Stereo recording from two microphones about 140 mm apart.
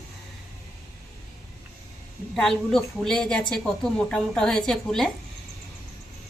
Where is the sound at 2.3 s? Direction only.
5° left (ahead or behind).